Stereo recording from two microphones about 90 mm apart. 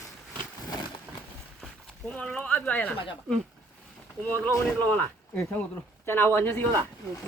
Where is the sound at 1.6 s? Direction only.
5° left (ahead or behind).